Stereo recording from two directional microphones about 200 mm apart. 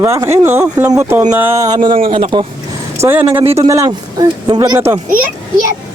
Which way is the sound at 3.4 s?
25° right (ahead or behind).